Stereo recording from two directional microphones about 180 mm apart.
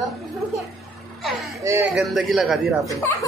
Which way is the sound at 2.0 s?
Centre (ahead or behind).